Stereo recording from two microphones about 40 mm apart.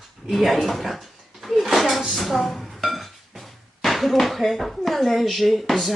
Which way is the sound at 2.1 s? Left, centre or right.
Centre.